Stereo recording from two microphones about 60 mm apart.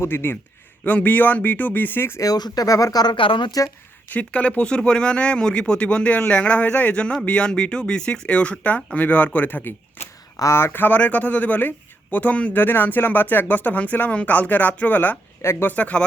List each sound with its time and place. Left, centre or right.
0.0 s speech: left
0.9 s speech: left
2.2 s speech: left
4.1 s speech: left
12.5 s speech: left
15.4 s speech: left
15.6 s speech: left